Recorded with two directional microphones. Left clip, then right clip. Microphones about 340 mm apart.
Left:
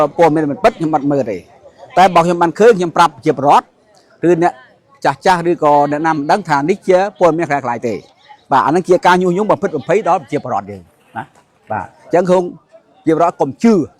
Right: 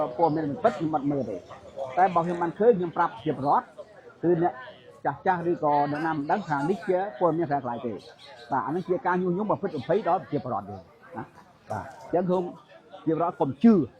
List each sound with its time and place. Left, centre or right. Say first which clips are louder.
0.0 s a man's voice: left 13 dB; left
11.7 s a man's voice: left 13 dB; centre